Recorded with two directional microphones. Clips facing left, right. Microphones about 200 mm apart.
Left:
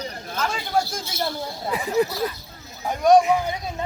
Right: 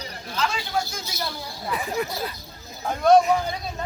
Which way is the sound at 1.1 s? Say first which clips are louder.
Left 7 dB; 25° left (ahead or behind).